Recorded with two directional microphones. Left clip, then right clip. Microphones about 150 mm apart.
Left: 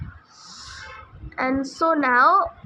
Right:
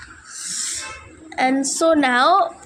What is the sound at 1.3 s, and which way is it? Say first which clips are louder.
A woman's voice: right 5 dB; 20° right (ahead or behind).